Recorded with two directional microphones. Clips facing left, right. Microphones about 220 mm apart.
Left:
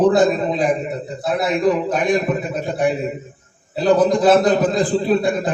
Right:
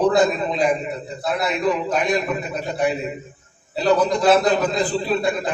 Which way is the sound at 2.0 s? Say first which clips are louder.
Left 4 dB; 50° left (ahead or behind).